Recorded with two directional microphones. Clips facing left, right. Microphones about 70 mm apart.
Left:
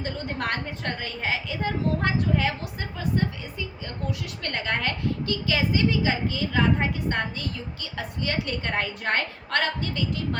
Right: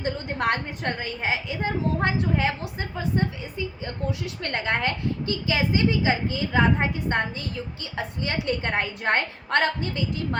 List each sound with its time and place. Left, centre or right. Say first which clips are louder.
0.0 s a woman's voice: right 4 dB; right
4.4 s a woman's voice: right 2 dB; right